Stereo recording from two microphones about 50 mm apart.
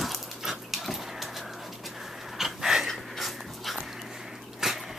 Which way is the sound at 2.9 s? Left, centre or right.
Centre.